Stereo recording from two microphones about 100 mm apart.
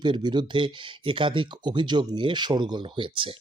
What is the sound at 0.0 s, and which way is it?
Speech, 50° right (ahead or behind).